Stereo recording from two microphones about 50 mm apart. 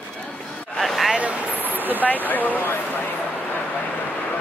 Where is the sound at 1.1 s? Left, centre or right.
Right.